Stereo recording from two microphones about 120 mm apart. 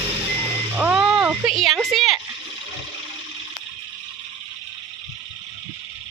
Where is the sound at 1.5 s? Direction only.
Centre (ahead or behind).